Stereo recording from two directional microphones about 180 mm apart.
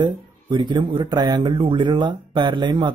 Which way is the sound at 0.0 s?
25° right (ahead or behind).